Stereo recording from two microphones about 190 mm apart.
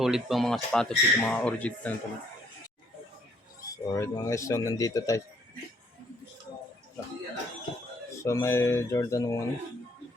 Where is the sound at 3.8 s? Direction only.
20° left (ahead or behind).